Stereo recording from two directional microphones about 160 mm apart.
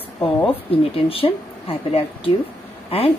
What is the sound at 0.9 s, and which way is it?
Speech, 35° left (ahead or behind).